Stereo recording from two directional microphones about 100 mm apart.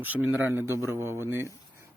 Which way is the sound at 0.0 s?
15° right (ahead or behind).